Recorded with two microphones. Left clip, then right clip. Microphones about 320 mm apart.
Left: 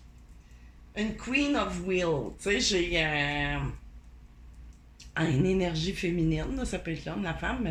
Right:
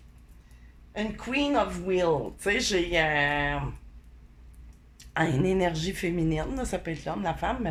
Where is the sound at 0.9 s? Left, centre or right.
Right.